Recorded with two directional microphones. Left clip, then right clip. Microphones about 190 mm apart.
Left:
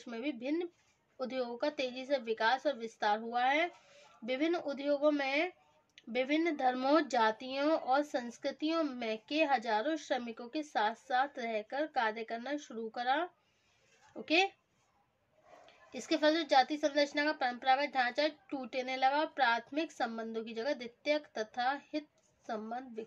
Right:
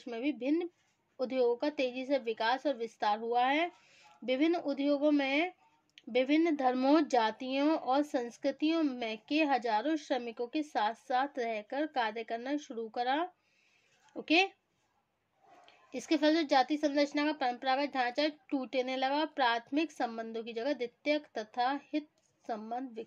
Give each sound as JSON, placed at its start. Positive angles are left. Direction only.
{"t": 0.0, "sound": "speech", "side_deg": -30}
{"t": 15.6, "sound": "speech", "side_deg": -35}